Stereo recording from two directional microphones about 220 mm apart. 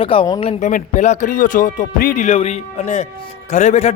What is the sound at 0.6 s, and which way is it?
A man's voice, 35° left (ahead or behind).